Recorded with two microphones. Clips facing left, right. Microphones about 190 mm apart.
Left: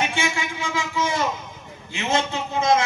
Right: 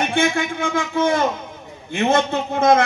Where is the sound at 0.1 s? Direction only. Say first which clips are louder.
Right 7 dB; 55° right (ahead or behind).